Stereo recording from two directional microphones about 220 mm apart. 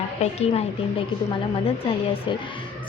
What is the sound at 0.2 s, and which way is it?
Speech, 30° left (ahead or behind).